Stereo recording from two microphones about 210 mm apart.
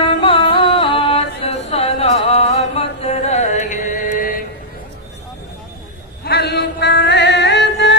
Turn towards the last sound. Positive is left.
turn(degrees=55)  # may be behind; listen again after turning